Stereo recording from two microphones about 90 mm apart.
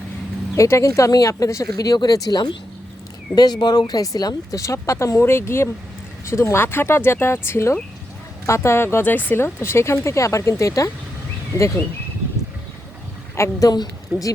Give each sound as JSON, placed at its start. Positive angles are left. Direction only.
{"t": 0.5, "sound": "speech", "side_deg": 35}
{"t": 11.5, "sound": "speech", "side_deg": 25}
{"t": 13.3, "sound": "speech", "side_deg": 30}
{"t": 13.7, "sound": "a woman's voice", "side_deg": 50}